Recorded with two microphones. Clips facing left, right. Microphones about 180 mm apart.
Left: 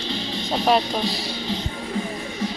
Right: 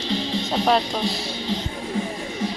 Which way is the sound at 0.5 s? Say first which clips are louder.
Left 1 dB; 5° left (ahead or behind).